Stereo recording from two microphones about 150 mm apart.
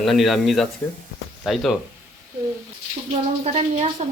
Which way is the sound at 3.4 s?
45° right (ahead or behind).